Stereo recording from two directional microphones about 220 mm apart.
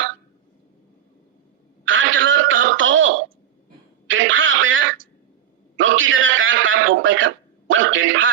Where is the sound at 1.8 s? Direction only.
60° right (ahead or behind).